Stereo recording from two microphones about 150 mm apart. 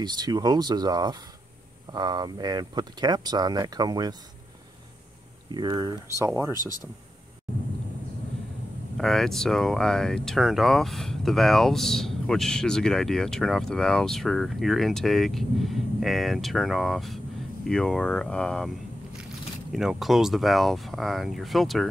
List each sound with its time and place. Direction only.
0.0 s speech: 25° right (ahead or behind)
5.5 s speech: 25° right (ahead or behind)
6.5 s speech: 25° left (ahead or behind)
8.9 s speech: 5° left (ahead or behind)
19.7 s speech: centre (ahead or behind)